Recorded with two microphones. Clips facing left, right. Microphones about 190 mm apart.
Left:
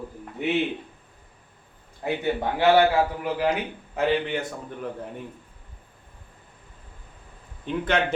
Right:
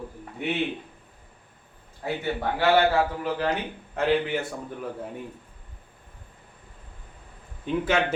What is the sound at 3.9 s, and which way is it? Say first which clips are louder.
Speech: even; 5° right (ahead or behind).